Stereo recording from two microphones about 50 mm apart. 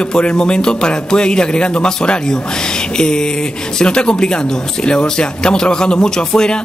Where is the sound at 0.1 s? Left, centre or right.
Centre.